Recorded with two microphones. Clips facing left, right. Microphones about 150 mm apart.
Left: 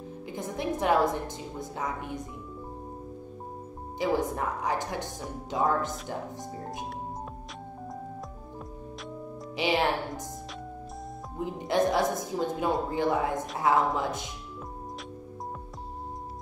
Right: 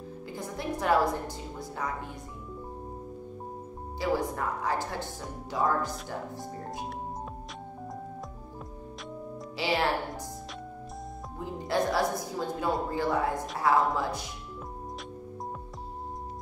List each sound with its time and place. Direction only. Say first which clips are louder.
0.3 s a woman's voice: left 3 dB; 20° left (ahead or behind)
4.0 s a woman's voice: left 2 dB; 20° left (ahead or behind)
9.6 s a woman's voice: left 2 dB; 20° left (ahead or behind)
11.3 s a woman's voice: left 3 dB; 20° left (ahead or behind)